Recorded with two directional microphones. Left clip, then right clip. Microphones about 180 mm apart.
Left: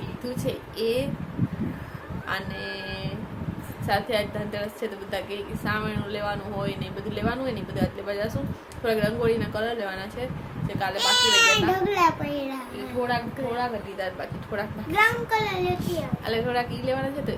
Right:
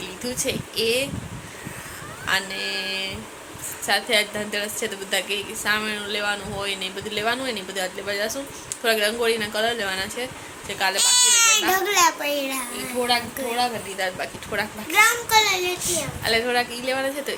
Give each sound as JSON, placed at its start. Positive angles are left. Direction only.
{"t": 0.3, "sound": "a woman's voice", "side_deg": -5}
{"t": 2.2, "sound": "a woman's voice", "side_deg": -5}
{"t": 10.9, "sound": "a child's voice", "side_deg": 15}
{"t": 14.0, "sound": "a woman's voice", "side_deg": -5}
{"t": 14.9, "sound": "a child's voice", "side_deg": 15}
{"t": 16.2, "sound": "a woman's voice", "side_deg": -15}
{"t": 16.6, "sound": "a woman's voice", "side_deg": -5}